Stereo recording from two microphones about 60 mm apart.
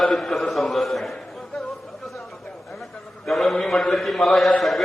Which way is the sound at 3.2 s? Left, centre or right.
Centre.